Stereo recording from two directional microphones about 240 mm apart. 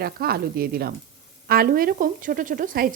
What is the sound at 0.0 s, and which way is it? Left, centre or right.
Speech, right.